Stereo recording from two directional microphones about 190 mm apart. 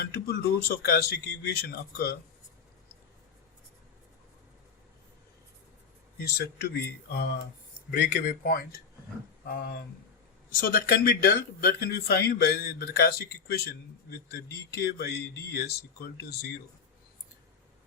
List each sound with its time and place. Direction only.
0.0 s speech: 55° left (ahead or behind)
6.2 s speech: 60° left (ahead or behind)